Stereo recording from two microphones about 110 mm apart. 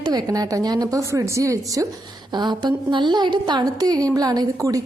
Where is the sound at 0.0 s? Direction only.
40° right (ahead or behind).